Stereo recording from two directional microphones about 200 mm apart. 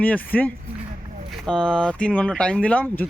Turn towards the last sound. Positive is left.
turn(degrees=10)  # may be behind; listen again after turning